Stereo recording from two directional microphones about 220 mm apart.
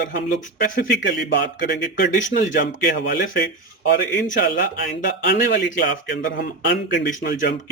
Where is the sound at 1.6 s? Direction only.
40° left (ahead or behind).